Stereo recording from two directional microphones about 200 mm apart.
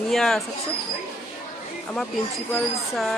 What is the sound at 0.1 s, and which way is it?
Speech, centre (ahead or behind).